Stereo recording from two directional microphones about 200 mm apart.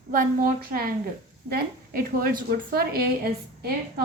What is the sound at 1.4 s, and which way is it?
A woman's voice, 50° right (ahead or behind).